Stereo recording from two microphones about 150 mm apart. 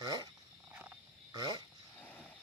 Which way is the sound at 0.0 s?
25° right (ahead or behind).